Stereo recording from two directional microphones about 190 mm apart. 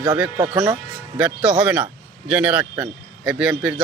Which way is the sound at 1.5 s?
5° right (ahead or behind).